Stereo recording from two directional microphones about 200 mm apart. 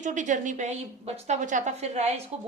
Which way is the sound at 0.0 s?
40° right (ahead or behind).